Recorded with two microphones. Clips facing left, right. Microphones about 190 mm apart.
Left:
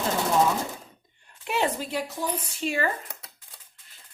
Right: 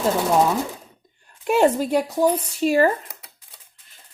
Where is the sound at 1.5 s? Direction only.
45° right (ahead or behind).